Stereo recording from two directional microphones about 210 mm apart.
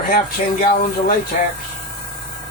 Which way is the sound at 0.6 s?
45° left (ahead or behind).